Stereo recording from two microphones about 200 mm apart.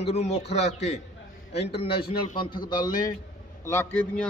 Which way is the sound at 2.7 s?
20° left (ahead or behind).